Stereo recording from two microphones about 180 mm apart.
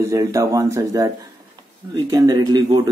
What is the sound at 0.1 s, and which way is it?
Speech, 20° right (ahead or behind).